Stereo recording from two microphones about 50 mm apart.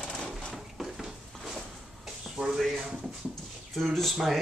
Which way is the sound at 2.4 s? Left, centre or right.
Right.